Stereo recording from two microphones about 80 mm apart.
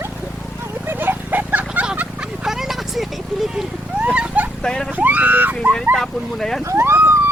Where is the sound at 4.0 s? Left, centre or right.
Centre.